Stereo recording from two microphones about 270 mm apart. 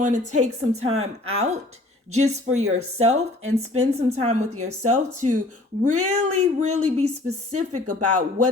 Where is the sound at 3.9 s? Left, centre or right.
Right.